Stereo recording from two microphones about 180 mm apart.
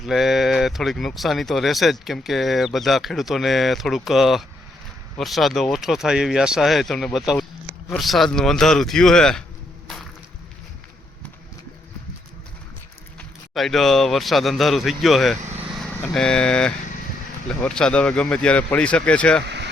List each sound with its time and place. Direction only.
0.0 s speech: centre (ahead or behind)
9.8 s music: centre (ahead or behind)
13.5 s speech: centre (ahead or behind)
19.5 s vehicle: 70° right (ahead or behind)